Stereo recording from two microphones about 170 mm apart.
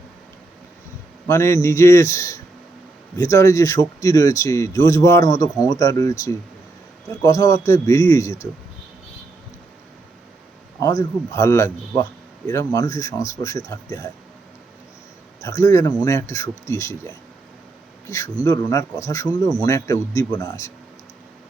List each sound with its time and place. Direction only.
1.3 s speech: 15° left (ahead or behind)
11.3 s speech: 15° left (ahead or behind)
15.4 s speech: 15° left (ahead or behind)